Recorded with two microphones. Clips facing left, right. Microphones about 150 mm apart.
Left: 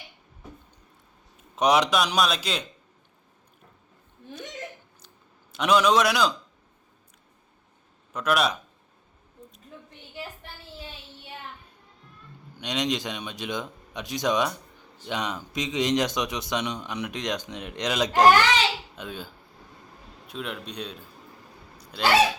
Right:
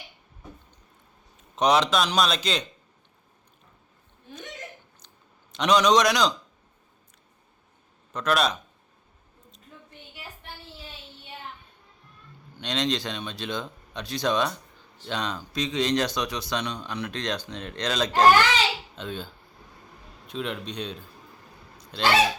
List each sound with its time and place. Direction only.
1.5 s speech: 10° left (ahead or behind)
5.0 s a sound: 5° left (ahead or behind)
8.1 s speech: 10° left (ahead or behind)
12.5 s speech: 15° left (ahead or behind)